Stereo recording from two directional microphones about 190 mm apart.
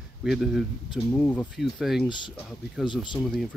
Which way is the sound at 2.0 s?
25° left (ahead or behind).